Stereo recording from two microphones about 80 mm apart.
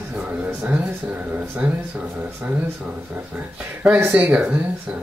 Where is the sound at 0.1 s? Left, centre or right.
Centre.